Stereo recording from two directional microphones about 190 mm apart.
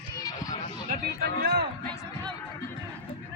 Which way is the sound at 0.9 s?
50° right (ahead or behind).